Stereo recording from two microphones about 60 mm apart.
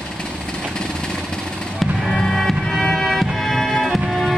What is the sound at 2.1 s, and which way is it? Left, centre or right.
Music, centre.